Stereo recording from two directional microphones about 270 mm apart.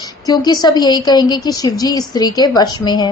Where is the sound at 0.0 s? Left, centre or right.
Centre.